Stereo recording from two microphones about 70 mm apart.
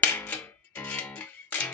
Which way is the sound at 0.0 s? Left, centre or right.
Left.